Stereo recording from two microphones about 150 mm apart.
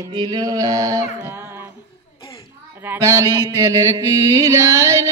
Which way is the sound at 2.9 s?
20° right (ahead or behind).